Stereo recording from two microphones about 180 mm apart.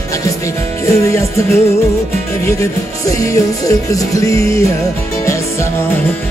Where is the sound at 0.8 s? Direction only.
15° left (ahead or behind).